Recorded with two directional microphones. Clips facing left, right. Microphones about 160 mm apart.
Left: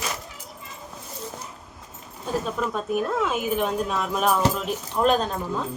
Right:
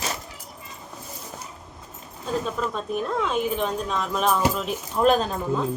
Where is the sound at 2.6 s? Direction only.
5° left (ahead or behind).